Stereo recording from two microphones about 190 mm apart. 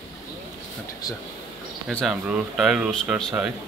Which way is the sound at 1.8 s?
Centre (ahead or behind).